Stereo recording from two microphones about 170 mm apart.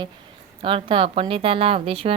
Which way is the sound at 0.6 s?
30° right (ahead or behind).